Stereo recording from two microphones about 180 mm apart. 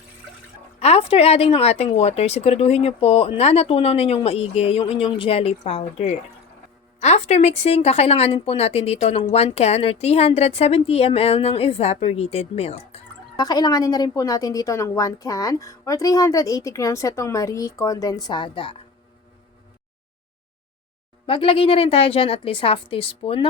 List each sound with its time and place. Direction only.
0.8 s speech: 35° left (ahead or behind)
13.3 s a woman's voice: 20° left (ahead or behind)
21.2 s speech: 30° left (ahead or behind)